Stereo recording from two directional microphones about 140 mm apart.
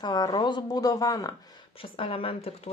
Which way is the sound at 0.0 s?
30° left (ahead or behind).